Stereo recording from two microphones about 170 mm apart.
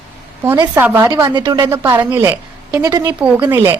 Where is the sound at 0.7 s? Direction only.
10° right (ahead or behind).